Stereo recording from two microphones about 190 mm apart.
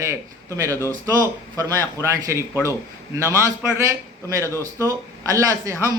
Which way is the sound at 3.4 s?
15° right (ahead or behind).